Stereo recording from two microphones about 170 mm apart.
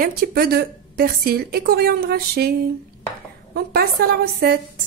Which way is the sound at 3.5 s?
65° right (ahead or behind).